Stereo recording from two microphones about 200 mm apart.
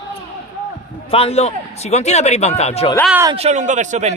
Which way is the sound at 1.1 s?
30° left (ahead or behind).